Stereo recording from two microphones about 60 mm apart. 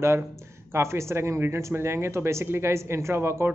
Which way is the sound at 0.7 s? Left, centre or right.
Right.